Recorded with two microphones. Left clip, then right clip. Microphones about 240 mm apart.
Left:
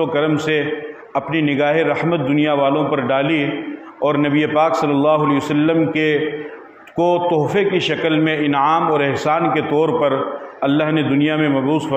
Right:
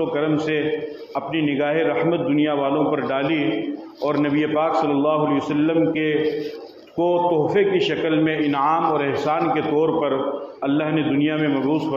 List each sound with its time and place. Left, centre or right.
0.1 s a man's voice: left